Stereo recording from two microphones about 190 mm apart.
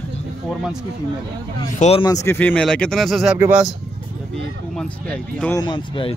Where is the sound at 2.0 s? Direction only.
15° left (ahead or behind); by 3.7 s 5° right (ahead or behind).